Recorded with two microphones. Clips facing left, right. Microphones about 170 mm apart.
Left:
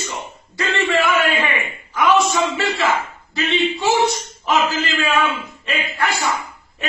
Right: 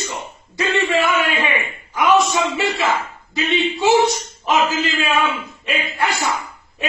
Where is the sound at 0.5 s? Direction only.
15° right (ahead or behind).